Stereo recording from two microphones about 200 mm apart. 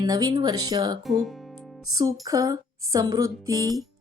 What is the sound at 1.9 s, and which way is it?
Speech, 20° right (ahead or behind).